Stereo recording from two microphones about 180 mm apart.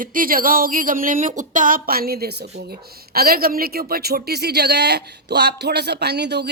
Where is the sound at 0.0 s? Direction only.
50° right (ahead or behind).